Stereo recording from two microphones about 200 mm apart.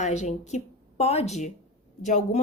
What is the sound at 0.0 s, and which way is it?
A woman's voice, 35° left (ahead or behind).